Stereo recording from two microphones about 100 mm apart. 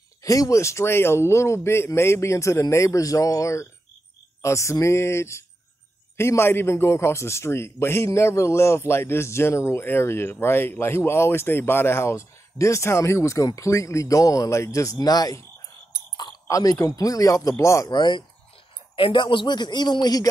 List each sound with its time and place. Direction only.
0.2 s a man's voice: 35° left (ahead or behind)
16.4 s speech: 35° left (ahead or behind)
17.9 s a man's voice: 50° left (ahead or behind)